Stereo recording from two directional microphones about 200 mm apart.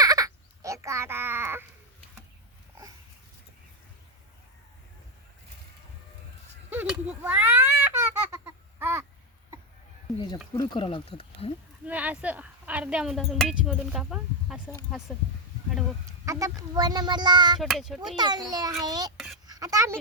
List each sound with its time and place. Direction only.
0.0 s crow: 20° right (ahead or behind)
6.7 s a sound: 5° right (ahead or behind)
7.2 s babbling: 10° right (ahead or behind)
10.5 s speech: 20° left (ahead or behind)
11.9 s speech: 5° right (ahead or behind)
16.0 s speech: 15° right (ahead or behind)
17.6 s a child's voice: centre (ahead or behind)
18.2 s speech: 20° right (ahead or behind)
19.1 s a sound: centre (ahead or behind)
19.5 s a sound: 15° right (ahead or behind)